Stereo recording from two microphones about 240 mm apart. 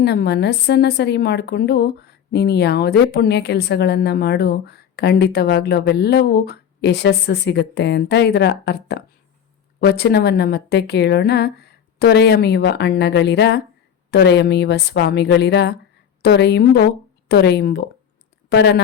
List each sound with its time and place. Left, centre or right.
0.0 s a woman's voice: left